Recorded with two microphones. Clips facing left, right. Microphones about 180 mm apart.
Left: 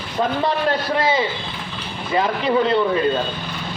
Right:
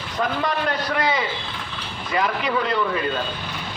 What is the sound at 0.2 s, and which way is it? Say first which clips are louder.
A man's voice: left 3 dB; 30° left (ahead or behind).